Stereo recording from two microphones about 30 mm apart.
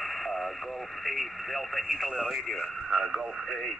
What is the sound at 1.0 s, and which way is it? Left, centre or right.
Speech, centre.